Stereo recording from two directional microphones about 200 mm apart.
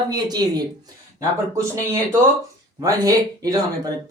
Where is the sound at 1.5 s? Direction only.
15° right (ahead or behind).